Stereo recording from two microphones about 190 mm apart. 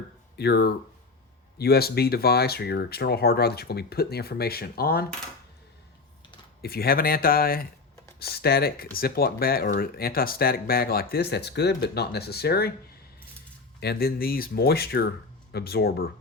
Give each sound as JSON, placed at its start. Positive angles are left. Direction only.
{"t": 0.3, "sound": "speech", "side_deg": 60}
{"t": 6.6, "sound": "speech", "side_deg": 50}
{"t": 13.7, "sound": "speech", "side_deg": 60}